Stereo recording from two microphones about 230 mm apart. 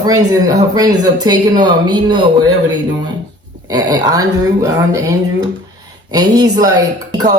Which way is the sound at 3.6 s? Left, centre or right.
Centre.